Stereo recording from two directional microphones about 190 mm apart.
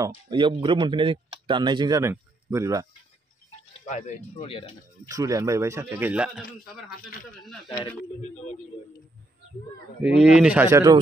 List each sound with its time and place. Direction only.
0.0 s speech: 20° right (ahead or behind)
3.8 s speech: 35° left (ahead or behind)
5.0 s speech: 20° right (ahead or behind)
7.6 s speech: 25° left (ahead or behind)
10.1 s speech: 5° right (ahead or behind)